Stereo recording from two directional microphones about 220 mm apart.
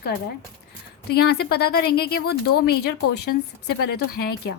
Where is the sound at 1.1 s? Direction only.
45° left (ahead or behind).